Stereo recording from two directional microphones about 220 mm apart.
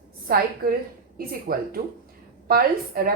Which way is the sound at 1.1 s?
40° right (ahead or behind).